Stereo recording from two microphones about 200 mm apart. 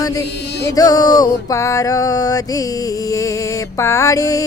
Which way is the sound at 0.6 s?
20° left (ahead or behind).